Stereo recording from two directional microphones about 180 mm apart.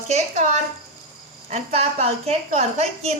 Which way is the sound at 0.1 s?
40° right (ahead or behind).